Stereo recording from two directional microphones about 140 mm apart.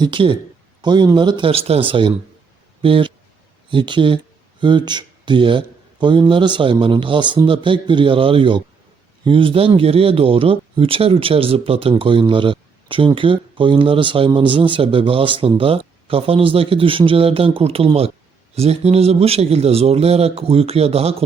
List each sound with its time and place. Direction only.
0.0 s a man's voice: 35° right (ahead or behind)